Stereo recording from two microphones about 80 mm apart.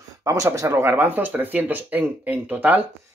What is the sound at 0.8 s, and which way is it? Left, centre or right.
Speech, right.